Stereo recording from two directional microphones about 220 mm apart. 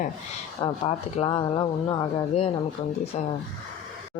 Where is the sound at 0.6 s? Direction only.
25° left (ahead or behind).